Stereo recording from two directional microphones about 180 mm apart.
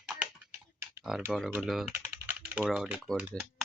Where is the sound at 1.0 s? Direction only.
Centre (ahead or behind).